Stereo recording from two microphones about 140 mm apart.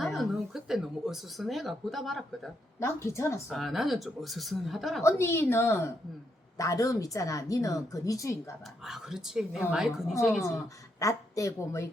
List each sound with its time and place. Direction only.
0.0 s a sound: centre (ahead or behind)
2.8 s a woman's voice: 20° left (ahead or behind)
3.5 s a woman's voice: centre (ahead or behind)
5.0 s a woman's voice: 20° left (ahead or behind)
8.6 s a woman's voice: 5° right (ahead or behind)
11.0 s a woman's voice: 20° left (ahead or behind)